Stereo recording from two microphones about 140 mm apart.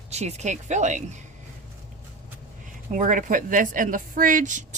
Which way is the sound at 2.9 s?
70° right (ahead or behind).